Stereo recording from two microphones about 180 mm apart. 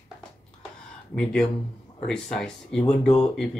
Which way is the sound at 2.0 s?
5° left (ahead or behind).